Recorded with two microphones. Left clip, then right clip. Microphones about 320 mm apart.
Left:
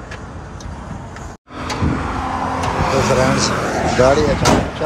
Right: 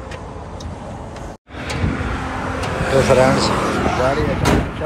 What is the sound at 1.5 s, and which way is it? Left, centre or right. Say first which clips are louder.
Vehicle: left 3 dB; left.